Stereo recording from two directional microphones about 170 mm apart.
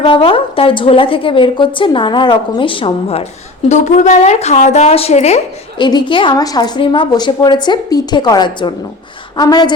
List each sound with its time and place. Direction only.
0.0 s a woman's voice: 30° left (ahead or behind)
3.7 s speech: 45° left (ahead or behind); by 9.7 s 25° left (ahead or behind)